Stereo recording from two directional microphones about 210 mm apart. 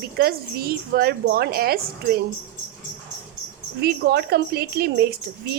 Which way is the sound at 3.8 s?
50° right (ahead or behind).